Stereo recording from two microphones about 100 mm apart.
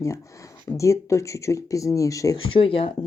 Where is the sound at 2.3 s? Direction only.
60° left (ahead or behind).